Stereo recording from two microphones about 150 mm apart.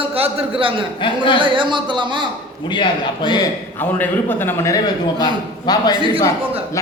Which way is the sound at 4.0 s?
15° left (ahead or behind).